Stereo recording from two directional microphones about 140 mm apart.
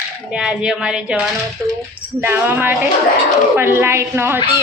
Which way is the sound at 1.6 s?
20° right (ahead or behind).